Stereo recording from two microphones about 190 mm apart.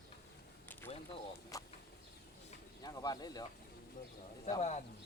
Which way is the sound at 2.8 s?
20° left (ahead or behind).